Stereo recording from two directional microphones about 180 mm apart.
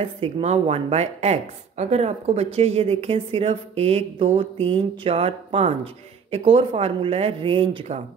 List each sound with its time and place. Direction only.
0.0 s speech: 35° right (ahead or behind)